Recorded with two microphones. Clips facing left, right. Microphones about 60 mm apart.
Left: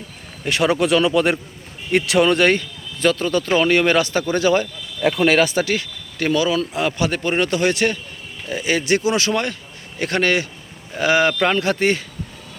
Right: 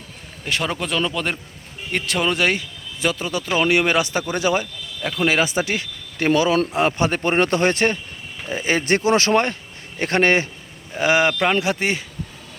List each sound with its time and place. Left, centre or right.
0.4 s speech: centre
4.6 s speech: centre
5.5 s speech: right
11.0 s speech: right